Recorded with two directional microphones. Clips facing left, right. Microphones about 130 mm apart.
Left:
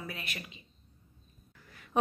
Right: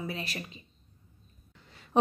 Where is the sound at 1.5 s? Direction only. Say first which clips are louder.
Right 4 dB; 25° right (ahead or behind).